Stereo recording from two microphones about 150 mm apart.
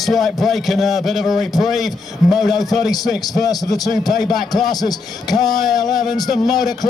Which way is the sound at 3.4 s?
25° left (ahead or behind).